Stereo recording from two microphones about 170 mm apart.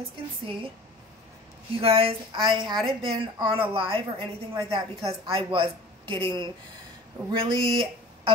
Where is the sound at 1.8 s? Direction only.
35° right (ahead or behind).